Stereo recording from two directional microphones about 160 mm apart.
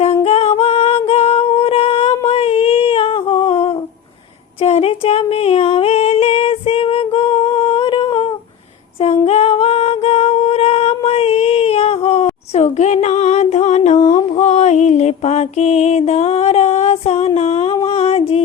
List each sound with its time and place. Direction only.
0.0 s singing: 40° left (ahead or behind)
0.6 s female singing: 40° left (ahead or behind)
4.6 s a sound: 40° left (ahead or behind)
9.2 s music: 40° left (ahead or behind)
14.3 s mantra: 45° left (ahead or behind)
17.8 s music: 40° left (ahead or behind)